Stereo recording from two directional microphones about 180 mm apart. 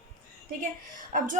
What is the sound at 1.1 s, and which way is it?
Speech, 50° right (ahead or behind).